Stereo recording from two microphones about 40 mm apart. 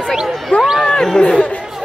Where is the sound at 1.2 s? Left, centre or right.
Left.